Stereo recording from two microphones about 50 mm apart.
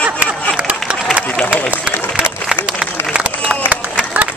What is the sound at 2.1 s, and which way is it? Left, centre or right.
Applause, centre.